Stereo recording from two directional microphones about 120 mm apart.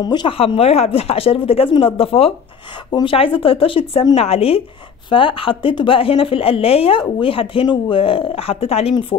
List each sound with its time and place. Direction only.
0.0 s speech: 35° left (ahead or behind)
0.3 s a woman's voice: 50° left (ahead or behind)